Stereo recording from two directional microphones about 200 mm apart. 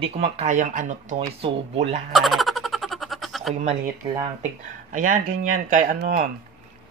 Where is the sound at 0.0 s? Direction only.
30° right (ahead or behind).